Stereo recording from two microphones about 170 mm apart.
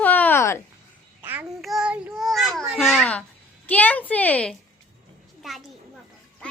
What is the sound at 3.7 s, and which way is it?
A child's voice, 10° left (ahead or behind).